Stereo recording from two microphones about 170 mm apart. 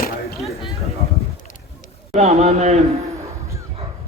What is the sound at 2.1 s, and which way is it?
Speech, 40° right (ahead or behind).